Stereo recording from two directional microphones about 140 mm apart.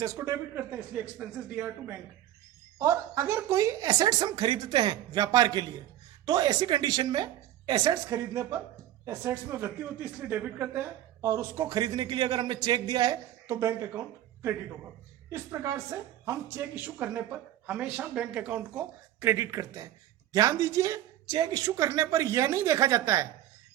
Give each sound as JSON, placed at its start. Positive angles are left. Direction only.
{"t": 0.0, "sound": "a woman's voice", "side_deg": -20}
{"t": 2.7, "sound": "a man's voice", "side_deg": -20}
{"t": 15.3, "sound": "a woman's voice", "side_deg": -20}